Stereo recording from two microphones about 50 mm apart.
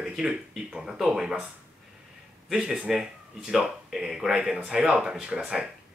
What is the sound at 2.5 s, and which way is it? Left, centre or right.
Speech, centre.